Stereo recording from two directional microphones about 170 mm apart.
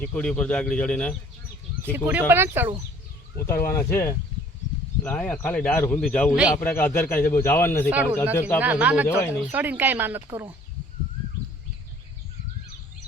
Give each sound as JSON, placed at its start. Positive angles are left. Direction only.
{"t": 0.0, "sound": "speech", "side_deg": 10}
{"t": 1.8, "sound": "speech", "side_deg": -10}
{"t": 3.3, "sound": "speech", "side_deg": 15}
{"t": 7.9, "sound": "speech", "side_deg": -10}
{"t": 8.4, "sound": "speech", "side_deg": 15}
{"t": 8.6, "sound": "speech", "side_deg": -10}